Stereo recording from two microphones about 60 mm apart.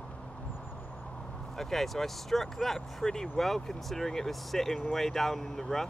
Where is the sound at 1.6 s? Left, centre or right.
Centre.